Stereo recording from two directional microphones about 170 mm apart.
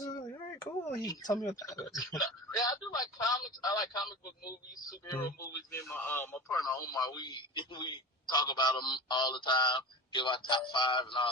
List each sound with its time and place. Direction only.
0.0 s a sound: 25° left (ahead or behind)
0.9 s a man's voice: 20° left (ahead or behind)
5.7 s a man's voice: 10° left (ahead or behind); by 11.3 s 30° left (ahead or behind)